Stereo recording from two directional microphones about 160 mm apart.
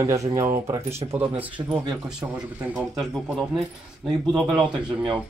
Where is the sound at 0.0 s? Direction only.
20° right (ahead or behind).